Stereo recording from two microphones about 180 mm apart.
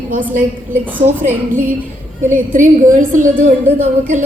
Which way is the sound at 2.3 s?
45° right (ahead or behind).